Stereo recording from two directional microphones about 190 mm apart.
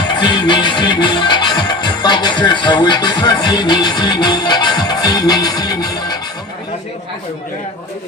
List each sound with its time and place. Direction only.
0.1 s music: 25° left (ahead or behind)